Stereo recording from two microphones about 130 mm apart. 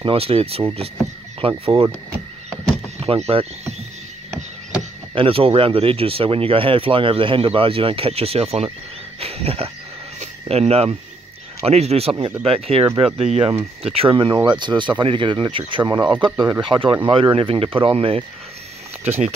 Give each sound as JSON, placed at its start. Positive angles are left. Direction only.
{"t": 0.0, "sound": "speech", "side_deg": -45}
{"t": 3.0, "sound": "speech", "side_deg": -50}
{"t": 5.1, "sound": "speech", "side_deg": -45}
{"t": 9.2, "sound": "wild animals", "side_deg": -50}
{"t": 10.2, "sound": "speech", "side_deg": -50}